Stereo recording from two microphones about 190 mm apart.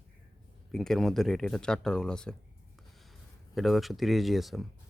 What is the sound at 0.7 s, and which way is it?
Speech, centre (ahead or behind).